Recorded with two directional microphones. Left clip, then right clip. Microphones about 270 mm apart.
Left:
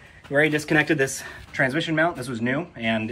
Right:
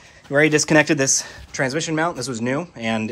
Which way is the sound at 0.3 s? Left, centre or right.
Right.